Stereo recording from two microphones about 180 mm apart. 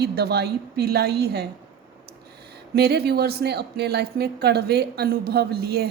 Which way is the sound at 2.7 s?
60° right (ahead or behind).